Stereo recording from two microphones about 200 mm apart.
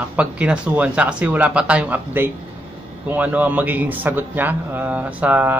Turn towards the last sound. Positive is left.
turn(degrees=-10)  # may be behind; listen again after turning